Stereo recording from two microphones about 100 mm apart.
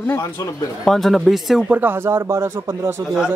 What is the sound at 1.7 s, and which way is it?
A man's voice, 20° right (ahead or behind).